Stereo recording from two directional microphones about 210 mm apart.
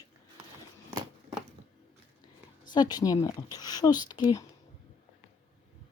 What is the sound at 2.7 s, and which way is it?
A woman's voice, 20° left (ahead or behind).